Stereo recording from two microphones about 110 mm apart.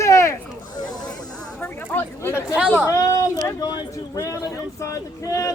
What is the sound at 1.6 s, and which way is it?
Speech, 20° left (ahead or behind).